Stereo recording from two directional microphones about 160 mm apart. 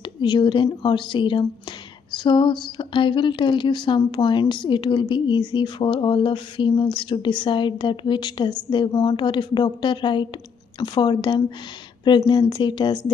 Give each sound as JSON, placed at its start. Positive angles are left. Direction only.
{"t": 0.2, "sound": "speech", "side_deg": 30}